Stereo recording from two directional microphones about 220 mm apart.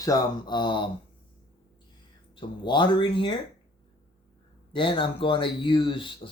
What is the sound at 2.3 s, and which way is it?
Speech, 20° left (ahead or behind).